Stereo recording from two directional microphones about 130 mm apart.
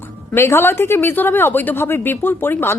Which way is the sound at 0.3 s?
20° left (ahead or behind).